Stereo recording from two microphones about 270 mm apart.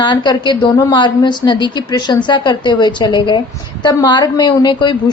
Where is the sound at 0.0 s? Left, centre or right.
Centre.